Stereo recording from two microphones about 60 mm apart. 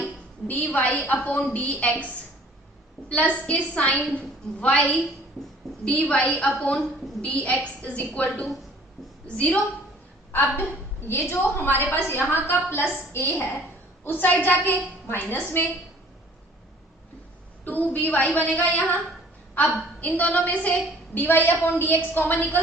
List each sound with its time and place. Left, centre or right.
0.7 s a woman's voice: left
3.1 s a woman's voice: left
10.3 s a woman's voice: left
14.0 s a woman's voice: left
17.7 s a woman's voice: left